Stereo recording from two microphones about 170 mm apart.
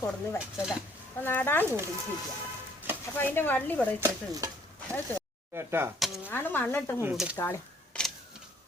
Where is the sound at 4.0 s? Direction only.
15° right (ahead or behind).